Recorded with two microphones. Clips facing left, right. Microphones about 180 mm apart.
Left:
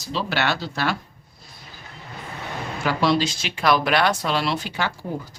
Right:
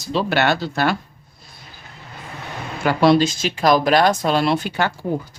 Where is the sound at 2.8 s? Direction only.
55° right (ahead or behind).